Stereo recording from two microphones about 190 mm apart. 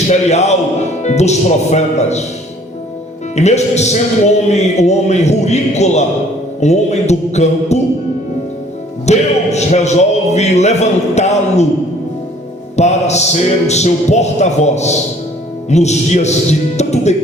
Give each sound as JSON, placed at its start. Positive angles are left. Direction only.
{"t": 0.1, "sound": "a man's voice", "side_deg": 35}
{"t": 3.3, "sound": "a man's voice", "side_deg": 35}
{"t": 9.0, "sound": "a man's voice", "side_deg": 35}
{"t": 12.7, "sound": "a man's voice", "side_deg": 35}